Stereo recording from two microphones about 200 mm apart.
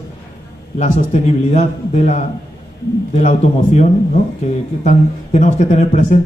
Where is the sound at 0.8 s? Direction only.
35° left (ahead or behind).